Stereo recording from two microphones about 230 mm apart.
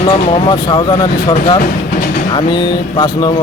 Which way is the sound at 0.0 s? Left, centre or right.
Left.